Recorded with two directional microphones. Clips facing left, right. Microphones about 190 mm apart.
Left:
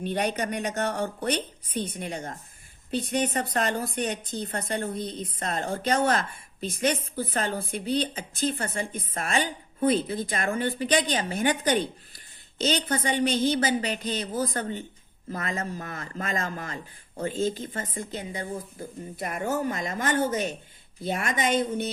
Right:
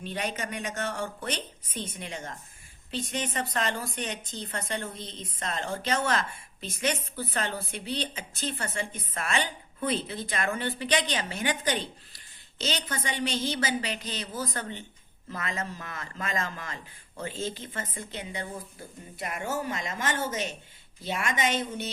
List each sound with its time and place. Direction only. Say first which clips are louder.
0.0 s a woman's voice: left 6 dB; 50° left (ahead or behind)
0.3 s a woman's voice: left 5 dB; 40° left (ahead or behind)
3.0 s a woman's voice: left 6 dB; 55° left (ahead or behind)
3.3 s a woman's voice: left 4 dB; 45° left (ahead or behind)